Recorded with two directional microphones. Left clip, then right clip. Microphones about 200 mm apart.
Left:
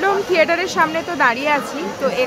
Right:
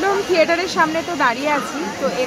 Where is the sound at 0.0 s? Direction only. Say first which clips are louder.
Left 1 dB; 10° left (ahead or behind).